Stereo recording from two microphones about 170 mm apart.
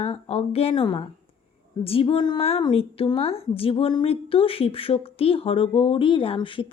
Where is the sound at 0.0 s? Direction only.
35° left (ahead or behind).